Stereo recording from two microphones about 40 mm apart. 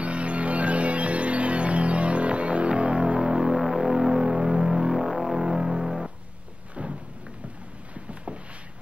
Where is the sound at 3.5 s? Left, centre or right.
Centre.